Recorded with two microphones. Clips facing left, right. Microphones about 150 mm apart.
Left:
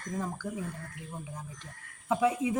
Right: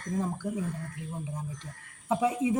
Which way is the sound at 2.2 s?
20° right (ahead or behind).